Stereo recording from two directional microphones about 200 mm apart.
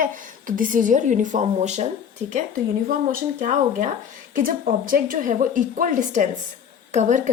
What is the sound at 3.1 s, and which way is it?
Speech, 40° right (ahead or behind).